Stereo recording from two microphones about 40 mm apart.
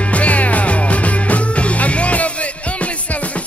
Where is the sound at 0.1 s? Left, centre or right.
Left.